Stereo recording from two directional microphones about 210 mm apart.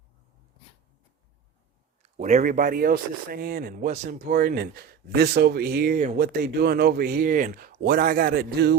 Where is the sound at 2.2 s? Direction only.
35° right (ahead or behind).